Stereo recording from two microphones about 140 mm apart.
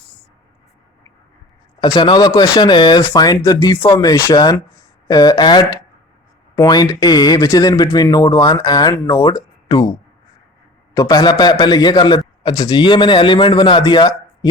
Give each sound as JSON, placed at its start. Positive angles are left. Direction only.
{"t": 1.8, "sound": "a man's voice", "side_deg": 30}
{"t": 10.9, "sound": "a man's voice", "side_deg": 25}